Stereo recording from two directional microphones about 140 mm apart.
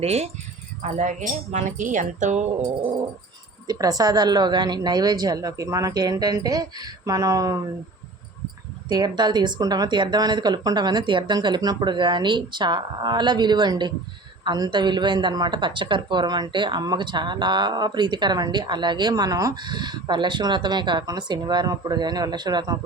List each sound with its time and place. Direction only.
0.0 s speech: 45° right (ahead or behind)
0.8 s speech: 60° right (ahead or behind)
3.7 s a woman's voice: 25° right (ahead or behind)
8.9 s a woman's voice: 30° right (ahead or behind)